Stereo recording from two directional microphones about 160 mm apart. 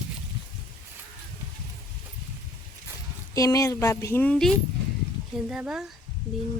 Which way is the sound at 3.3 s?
20° left (ahead or behind).